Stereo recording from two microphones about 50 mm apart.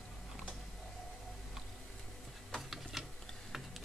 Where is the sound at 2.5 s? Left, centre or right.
Centre.